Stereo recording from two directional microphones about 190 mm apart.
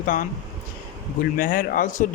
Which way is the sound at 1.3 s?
45° left (ahead or behind).